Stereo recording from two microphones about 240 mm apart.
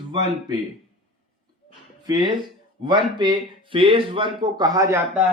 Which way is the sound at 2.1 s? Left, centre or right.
Centre.